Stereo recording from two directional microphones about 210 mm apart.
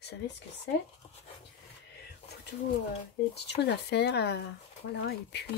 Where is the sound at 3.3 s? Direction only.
55° left (ahead or behind).